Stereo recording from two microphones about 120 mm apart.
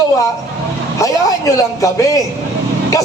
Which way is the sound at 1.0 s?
30° left (ahead or behind).